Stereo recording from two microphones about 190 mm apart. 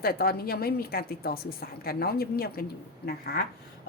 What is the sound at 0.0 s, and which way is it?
Speech, 55° left (ahead or behind).